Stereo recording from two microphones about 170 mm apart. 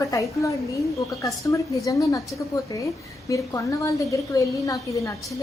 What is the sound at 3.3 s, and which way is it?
A woman's voice, 20° left (ahead or behind).